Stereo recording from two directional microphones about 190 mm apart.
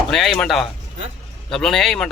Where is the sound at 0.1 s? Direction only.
Centre (ahead or behind).